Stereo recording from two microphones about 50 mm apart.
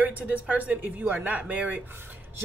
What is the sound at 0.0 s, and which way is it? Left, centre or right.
Speech, right.